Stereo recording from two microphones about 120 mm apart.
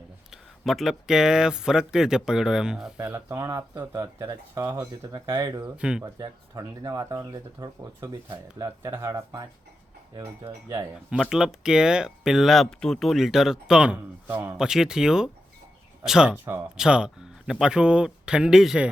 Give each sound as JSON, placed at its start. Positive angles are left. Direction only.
{"t": 0.3, "sound": "speech", "side_deg": 0}
{"t": 3.2, "sound": "speech", "side_deg": -25}
{"t": 4.9, "sound": "speech", "side_deg": -35}
{"t": 5.7, "sound": "speech", "side_deg": -10}
{"t": 6.0, "sound": "speech", "side_deg": -30}
{"t": 8.8, "sound": "speech", "side_deg": -25}
{"t": 11.1, "sound": "speech", "side_deg": -5}
{"t": 14.3, "sound": "speech", "side_deg": -20}
{"t": 14.5, "sound": "speech", "side_deg": -5}